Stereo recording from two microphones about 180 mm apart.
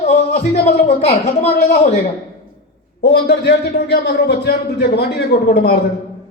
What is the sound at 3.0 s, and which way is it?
A man's voice, 65° left (ahead or behind).